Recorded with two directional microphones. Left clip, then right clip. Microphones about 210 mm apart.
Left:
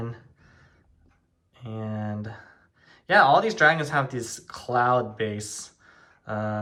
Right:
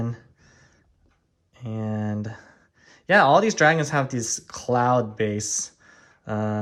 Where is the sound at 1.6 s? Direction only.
30° right (ahead or behind).